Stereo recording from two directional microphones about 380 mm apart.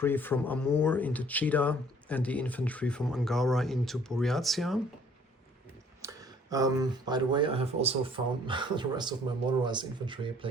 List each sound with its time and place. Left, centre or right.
0.0 s speech: centre
6.0 s speech: centre